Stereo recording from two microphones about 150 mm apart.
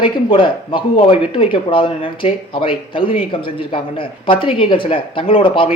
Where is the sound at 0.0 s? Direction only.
35° left (ahead or behind).